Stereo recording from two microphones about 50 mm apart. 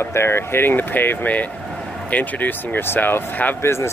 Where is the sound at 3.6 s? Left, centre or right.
Left.